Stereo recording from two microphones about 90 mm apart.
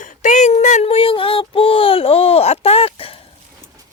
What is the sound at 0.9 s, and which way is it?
Speech, 85° left.